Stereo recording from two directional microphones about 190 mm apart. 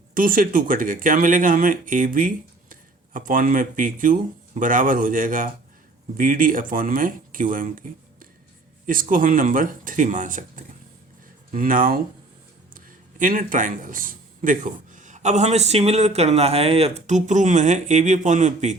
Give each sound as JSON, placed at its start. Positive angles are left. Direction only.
{"t": 0.1, "sound": "a man's voice", "side_deg": -45}